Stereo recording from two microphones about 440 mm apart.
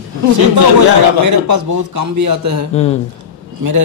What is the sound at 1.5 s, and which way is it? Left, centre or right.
A man's voice, right.